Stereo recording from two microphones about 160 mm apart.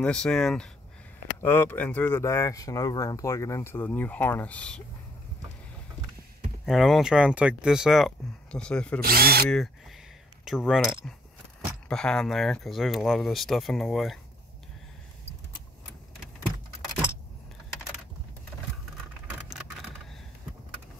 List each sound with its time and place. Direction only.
0.0 s speech: 5° left (ahead or behind)
6.6 s speech: centre (ahead or behind)
9.0 s speech: 70° right (ahead or behind)
10.4 s speech: centre (ahead or behind)